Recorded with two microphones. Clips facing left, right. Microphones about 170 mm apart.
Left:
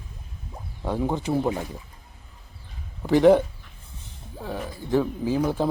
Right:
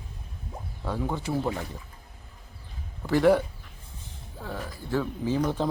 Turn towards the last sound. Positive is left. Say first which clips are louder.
# left 3 dB
turn(degrees=10)  # may be behind; listen again after turning